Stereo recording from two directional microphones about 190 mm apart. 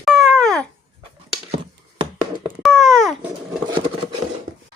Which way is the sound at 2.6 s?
Centre (ahead or behind).